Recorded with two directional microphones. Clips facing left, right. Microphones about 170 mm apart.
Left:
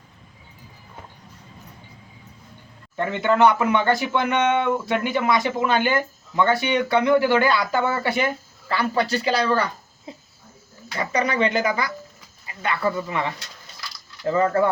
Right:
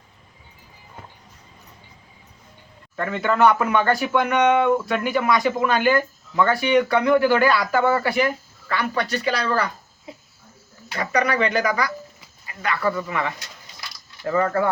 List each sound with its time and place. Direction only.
2.9 s speech: 20° left (ahead or behind)
10.9 s speech: 25° left (ahead or behind)